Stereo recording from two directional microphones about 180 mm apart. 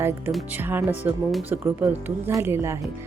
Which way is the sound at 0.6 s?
10° right (ahead or behind).